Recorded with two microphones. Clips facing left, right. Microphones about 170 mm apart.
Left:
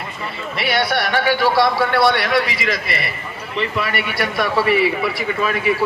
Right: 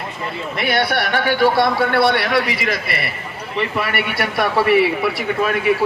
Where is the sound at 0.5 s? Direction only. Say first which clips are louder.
Even; 50° right (ahead or behind).